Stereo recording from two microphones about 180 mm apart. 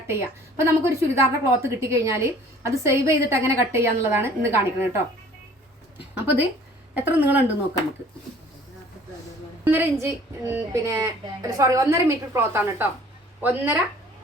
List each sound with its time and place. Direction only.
0.1 s a woman's voice: 15° right (ahead or behind)
6.9 s a woman's voice: 10° right (ahead or behind)
9.6 s a woman's voice: 10° right (ahead or behind)